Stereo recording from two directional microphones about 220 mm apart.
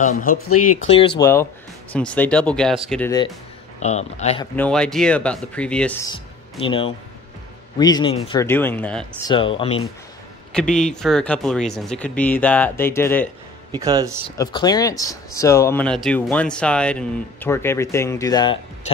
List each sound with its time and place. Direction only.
0.0 s speech: 35° left (ahead or behind)
0.3 s speech: 80° left
0.8 s speech: 25° left (ahead or behind)
1.2 s speech: 10° left (ahead or behind)
3.8 s speech: 30° left (ahead or behind)
4.6 s speech: 5° left (ahead or behind)
6.6 s speech: 25° left (ahead or behind); by 9.0 s 10° left (ahead or behind)
9.3 s speech: 25° left (ahead or behind)
10.5 s speech: 5° left (ahead or behind)
13.7 s a man's voice: 15° right (ahead or behind)
14.4 s speech: 20° left (ahead or behind)